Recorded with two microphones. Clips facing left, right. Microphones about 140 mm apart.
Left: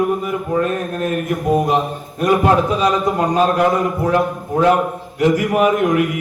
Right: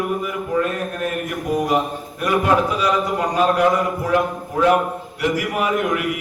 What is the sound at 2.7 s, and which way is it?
Mantra, 30° left (ahead or behind).